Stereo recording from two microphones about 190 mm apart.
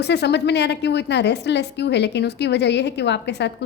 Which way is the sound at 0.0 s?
60° left (ahead or behind).